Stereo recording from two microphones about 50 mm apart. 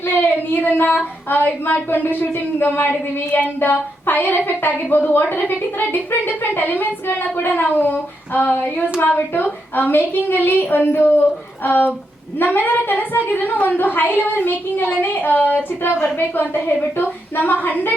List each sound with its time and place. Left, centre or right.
0.0 s child singing: left
1.3 s a woman's voice: left